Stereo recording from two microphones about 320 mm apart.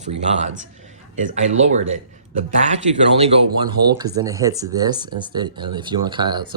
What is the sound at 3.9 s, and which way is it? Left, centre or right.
Speech, centre.